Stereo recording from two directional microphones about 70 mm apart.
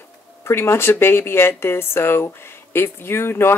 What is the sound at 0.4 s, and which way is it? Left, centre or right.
Speech, left.